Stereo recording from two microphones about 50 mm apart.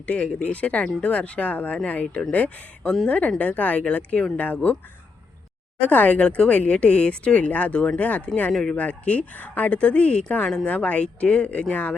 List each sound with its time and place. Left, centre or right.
0.0 s speech: left
5.8 s speech: left